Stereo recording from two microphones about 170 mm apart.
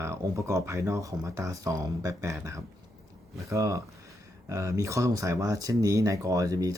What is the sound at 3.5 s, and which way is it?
Speech, 20° right (ahead or behind).